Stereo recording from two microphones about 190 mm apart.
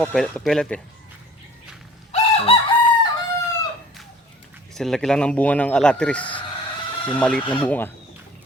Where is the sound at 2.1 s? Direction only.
30° left (ahead or behind).